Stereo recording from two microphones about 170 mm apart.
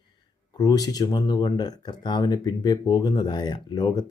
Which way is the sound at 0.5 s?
25° left (ahead or behind).